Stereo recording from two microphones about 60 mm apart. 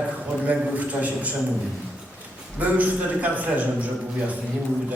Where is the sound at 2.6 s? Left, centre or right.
Right.